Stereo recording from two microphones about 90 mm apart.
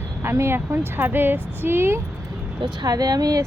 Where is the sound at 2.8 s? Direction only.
45° right (ahead or behind).